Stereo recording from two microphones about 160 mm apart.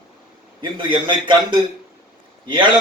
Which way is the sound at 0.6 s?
30° right (ahead or behind).